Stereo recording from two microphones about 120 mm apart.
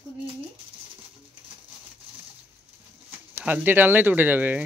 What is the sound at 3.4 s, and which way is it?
Speech, 15° right (ahead or behind).